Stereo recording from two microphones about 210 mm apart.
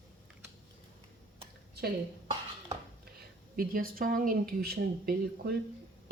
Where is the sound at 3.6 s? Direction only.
45° right (ahead or behind).